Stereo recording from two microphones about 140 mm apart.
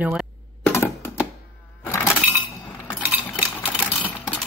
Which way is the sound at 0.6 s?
15° left (ahead or behind).